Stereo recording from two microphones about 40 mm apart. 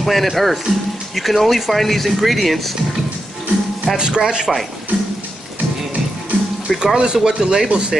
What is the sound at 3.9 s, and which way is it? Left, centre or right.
Speech, right.